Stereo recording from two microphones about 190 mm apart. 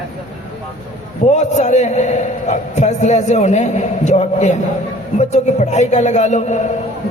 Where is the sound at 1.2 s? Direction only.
40° left (ahead or behind).